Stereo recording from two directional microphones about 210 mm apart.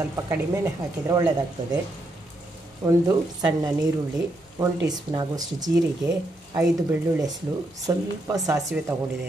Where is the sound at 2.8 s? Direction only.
15° right (ahead or behind).